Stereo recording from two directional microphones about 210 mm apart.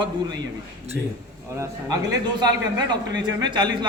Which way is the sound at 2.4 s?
20° right (ahead or behind).